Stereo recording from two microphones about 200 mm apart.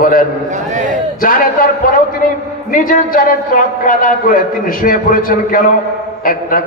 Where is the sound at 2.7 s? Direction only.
45° left (ahead or behind).